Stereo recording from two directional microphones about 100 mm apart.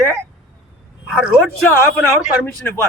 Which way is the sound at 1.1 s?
5° right (ahead or behind).